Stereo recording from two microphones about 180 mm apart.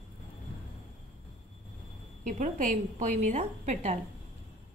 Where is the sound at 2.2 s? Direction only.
45° right (ahead or behind).